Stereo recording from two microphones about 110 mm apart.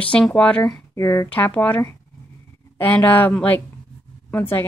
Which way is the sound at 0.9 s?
25° left (ahead or behind).